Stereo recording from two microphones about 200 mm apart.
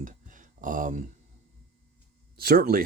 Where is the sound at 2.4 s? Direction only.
50° right (ahead or behind).